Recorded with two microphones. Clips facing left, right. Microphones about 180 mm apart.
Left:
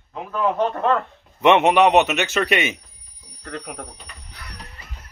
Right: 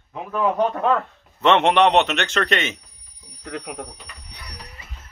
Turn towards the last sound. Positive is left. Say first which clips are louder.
# even
turn(degrees=-20)  # may be behind; listen again after turning